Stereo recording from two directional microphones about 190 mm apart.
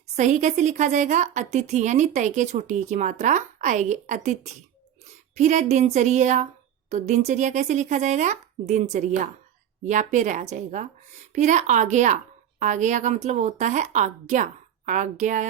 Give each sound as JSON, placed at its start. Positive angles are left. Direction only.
{"t": 0.2, "sound": "a woman's voice", "side_deg": -40}